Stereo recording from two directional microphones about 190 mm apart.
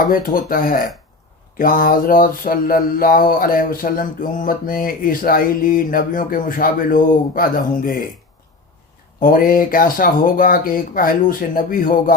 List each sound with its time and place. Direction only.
0.1 s mantra: 45° left (ahead or behind)
9.2 s mantra: 50° left (ahead or behind)